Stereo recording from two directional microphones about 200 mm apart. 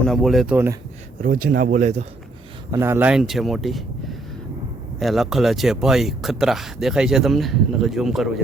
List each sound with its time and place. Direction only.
0.1 s speech: centre (ahead or behind)
1.2 s speech: 45° right (ahead or behind)
2.7 s speech: 10° right (ahead or behind)